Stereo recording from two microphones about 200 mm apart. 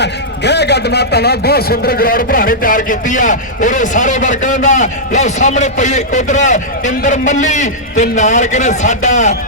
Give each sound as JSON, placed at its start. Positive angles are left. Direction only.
{"t": 0.0, "sound": "a man's voice", "side_deg": 55}